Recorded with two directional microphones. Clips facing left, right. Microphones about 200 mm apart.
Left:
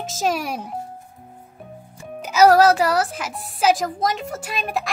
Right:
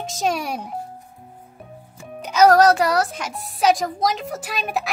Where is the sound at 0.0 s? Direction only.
Centre (ahead or behind).